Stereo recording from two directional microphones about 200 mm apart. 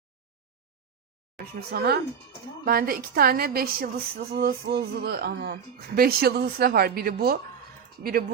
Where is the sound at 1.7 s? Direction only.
55° right (ahead or behind).